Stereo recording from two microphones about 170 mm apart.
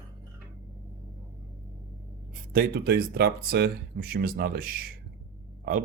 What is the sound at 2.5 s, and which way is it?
Speech, 65° right (ahead or behind).